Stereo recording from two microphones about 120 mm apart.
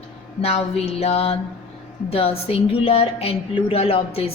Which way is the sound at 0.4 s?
60° left (ahead or behind).